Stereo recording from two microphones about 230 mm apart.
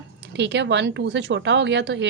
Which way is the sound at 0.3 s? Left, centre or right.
Right.